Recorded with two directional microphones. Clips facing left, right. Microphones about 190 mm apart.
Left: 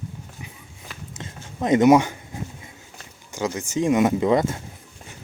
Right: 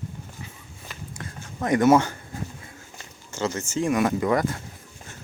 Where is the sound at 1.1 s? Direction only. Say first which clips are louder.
Left 2 dB; 20° left (ahead or behind).